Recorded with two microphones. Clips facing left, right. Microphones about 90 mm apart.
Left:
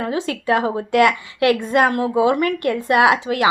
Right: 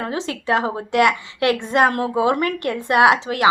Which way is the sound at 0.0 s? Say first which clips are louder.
Left 3 dB; 30° right (ahead or behind).